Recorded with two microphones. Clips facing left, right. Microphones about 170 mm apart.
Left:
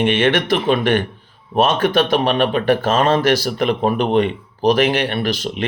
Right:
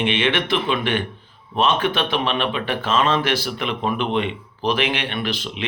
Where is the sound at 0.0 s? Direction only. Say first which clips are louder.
Left 5 dB; 45° left (ahead or behind).